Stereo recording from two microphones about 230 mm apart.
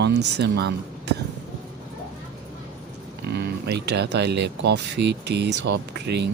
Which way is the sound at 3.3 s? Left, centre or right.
Right.